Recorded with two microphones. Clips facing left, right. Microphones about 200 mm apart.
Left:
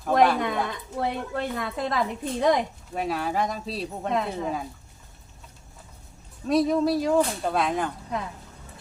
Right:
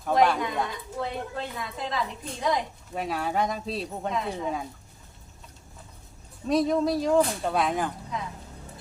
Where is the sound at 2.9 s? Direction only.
Centre (ahead or behind).